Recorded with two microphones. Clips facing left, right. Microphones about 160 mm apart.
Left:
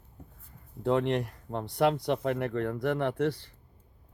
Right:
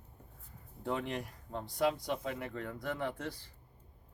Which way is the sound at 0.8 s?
70° left (ahead or behind).